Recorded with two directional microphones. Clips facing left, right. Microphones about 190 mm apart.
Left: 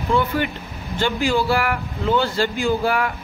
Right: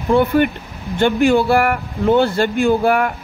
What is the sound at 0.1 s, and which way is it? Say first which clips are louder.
Speech: right 7 dB; 55° right (ahead or behind).